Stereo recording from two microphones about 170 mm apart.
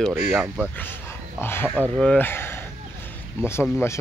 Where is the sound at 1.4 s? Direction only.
15° left (ahead or behind).